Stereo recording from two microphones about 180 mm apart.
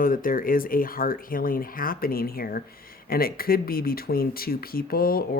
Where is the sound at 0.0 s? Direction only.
50° left (ahead or behind).